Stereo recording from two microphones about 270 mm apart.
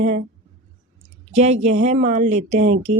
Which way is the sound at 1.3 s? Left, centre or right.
Right.